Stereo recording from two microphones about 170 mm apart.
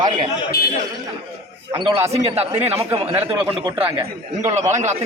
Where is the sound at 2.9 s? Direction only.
35° right (ahead or behind).